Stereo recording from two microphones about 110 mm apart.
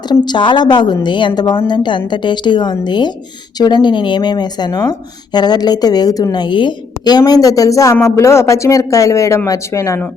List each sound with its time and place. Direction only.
0.1 s a woman's voice: 45° left (ahead or behind); by 10.0 s 30° left (ahead or behind)